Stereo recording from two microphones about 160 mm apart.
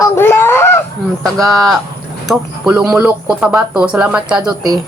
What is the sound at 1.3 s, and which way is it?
Speech, centre (ahead or behind).